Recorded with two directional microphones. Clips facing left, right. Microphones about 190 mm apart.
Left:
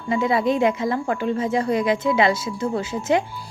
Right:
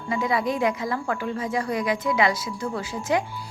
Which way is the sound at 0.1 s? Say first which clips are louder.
Left 5 dB; 25° left (ahead or behind).